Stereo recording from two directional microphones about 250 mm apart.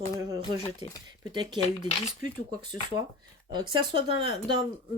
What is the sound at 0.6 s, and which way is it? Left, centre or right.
Speech, left.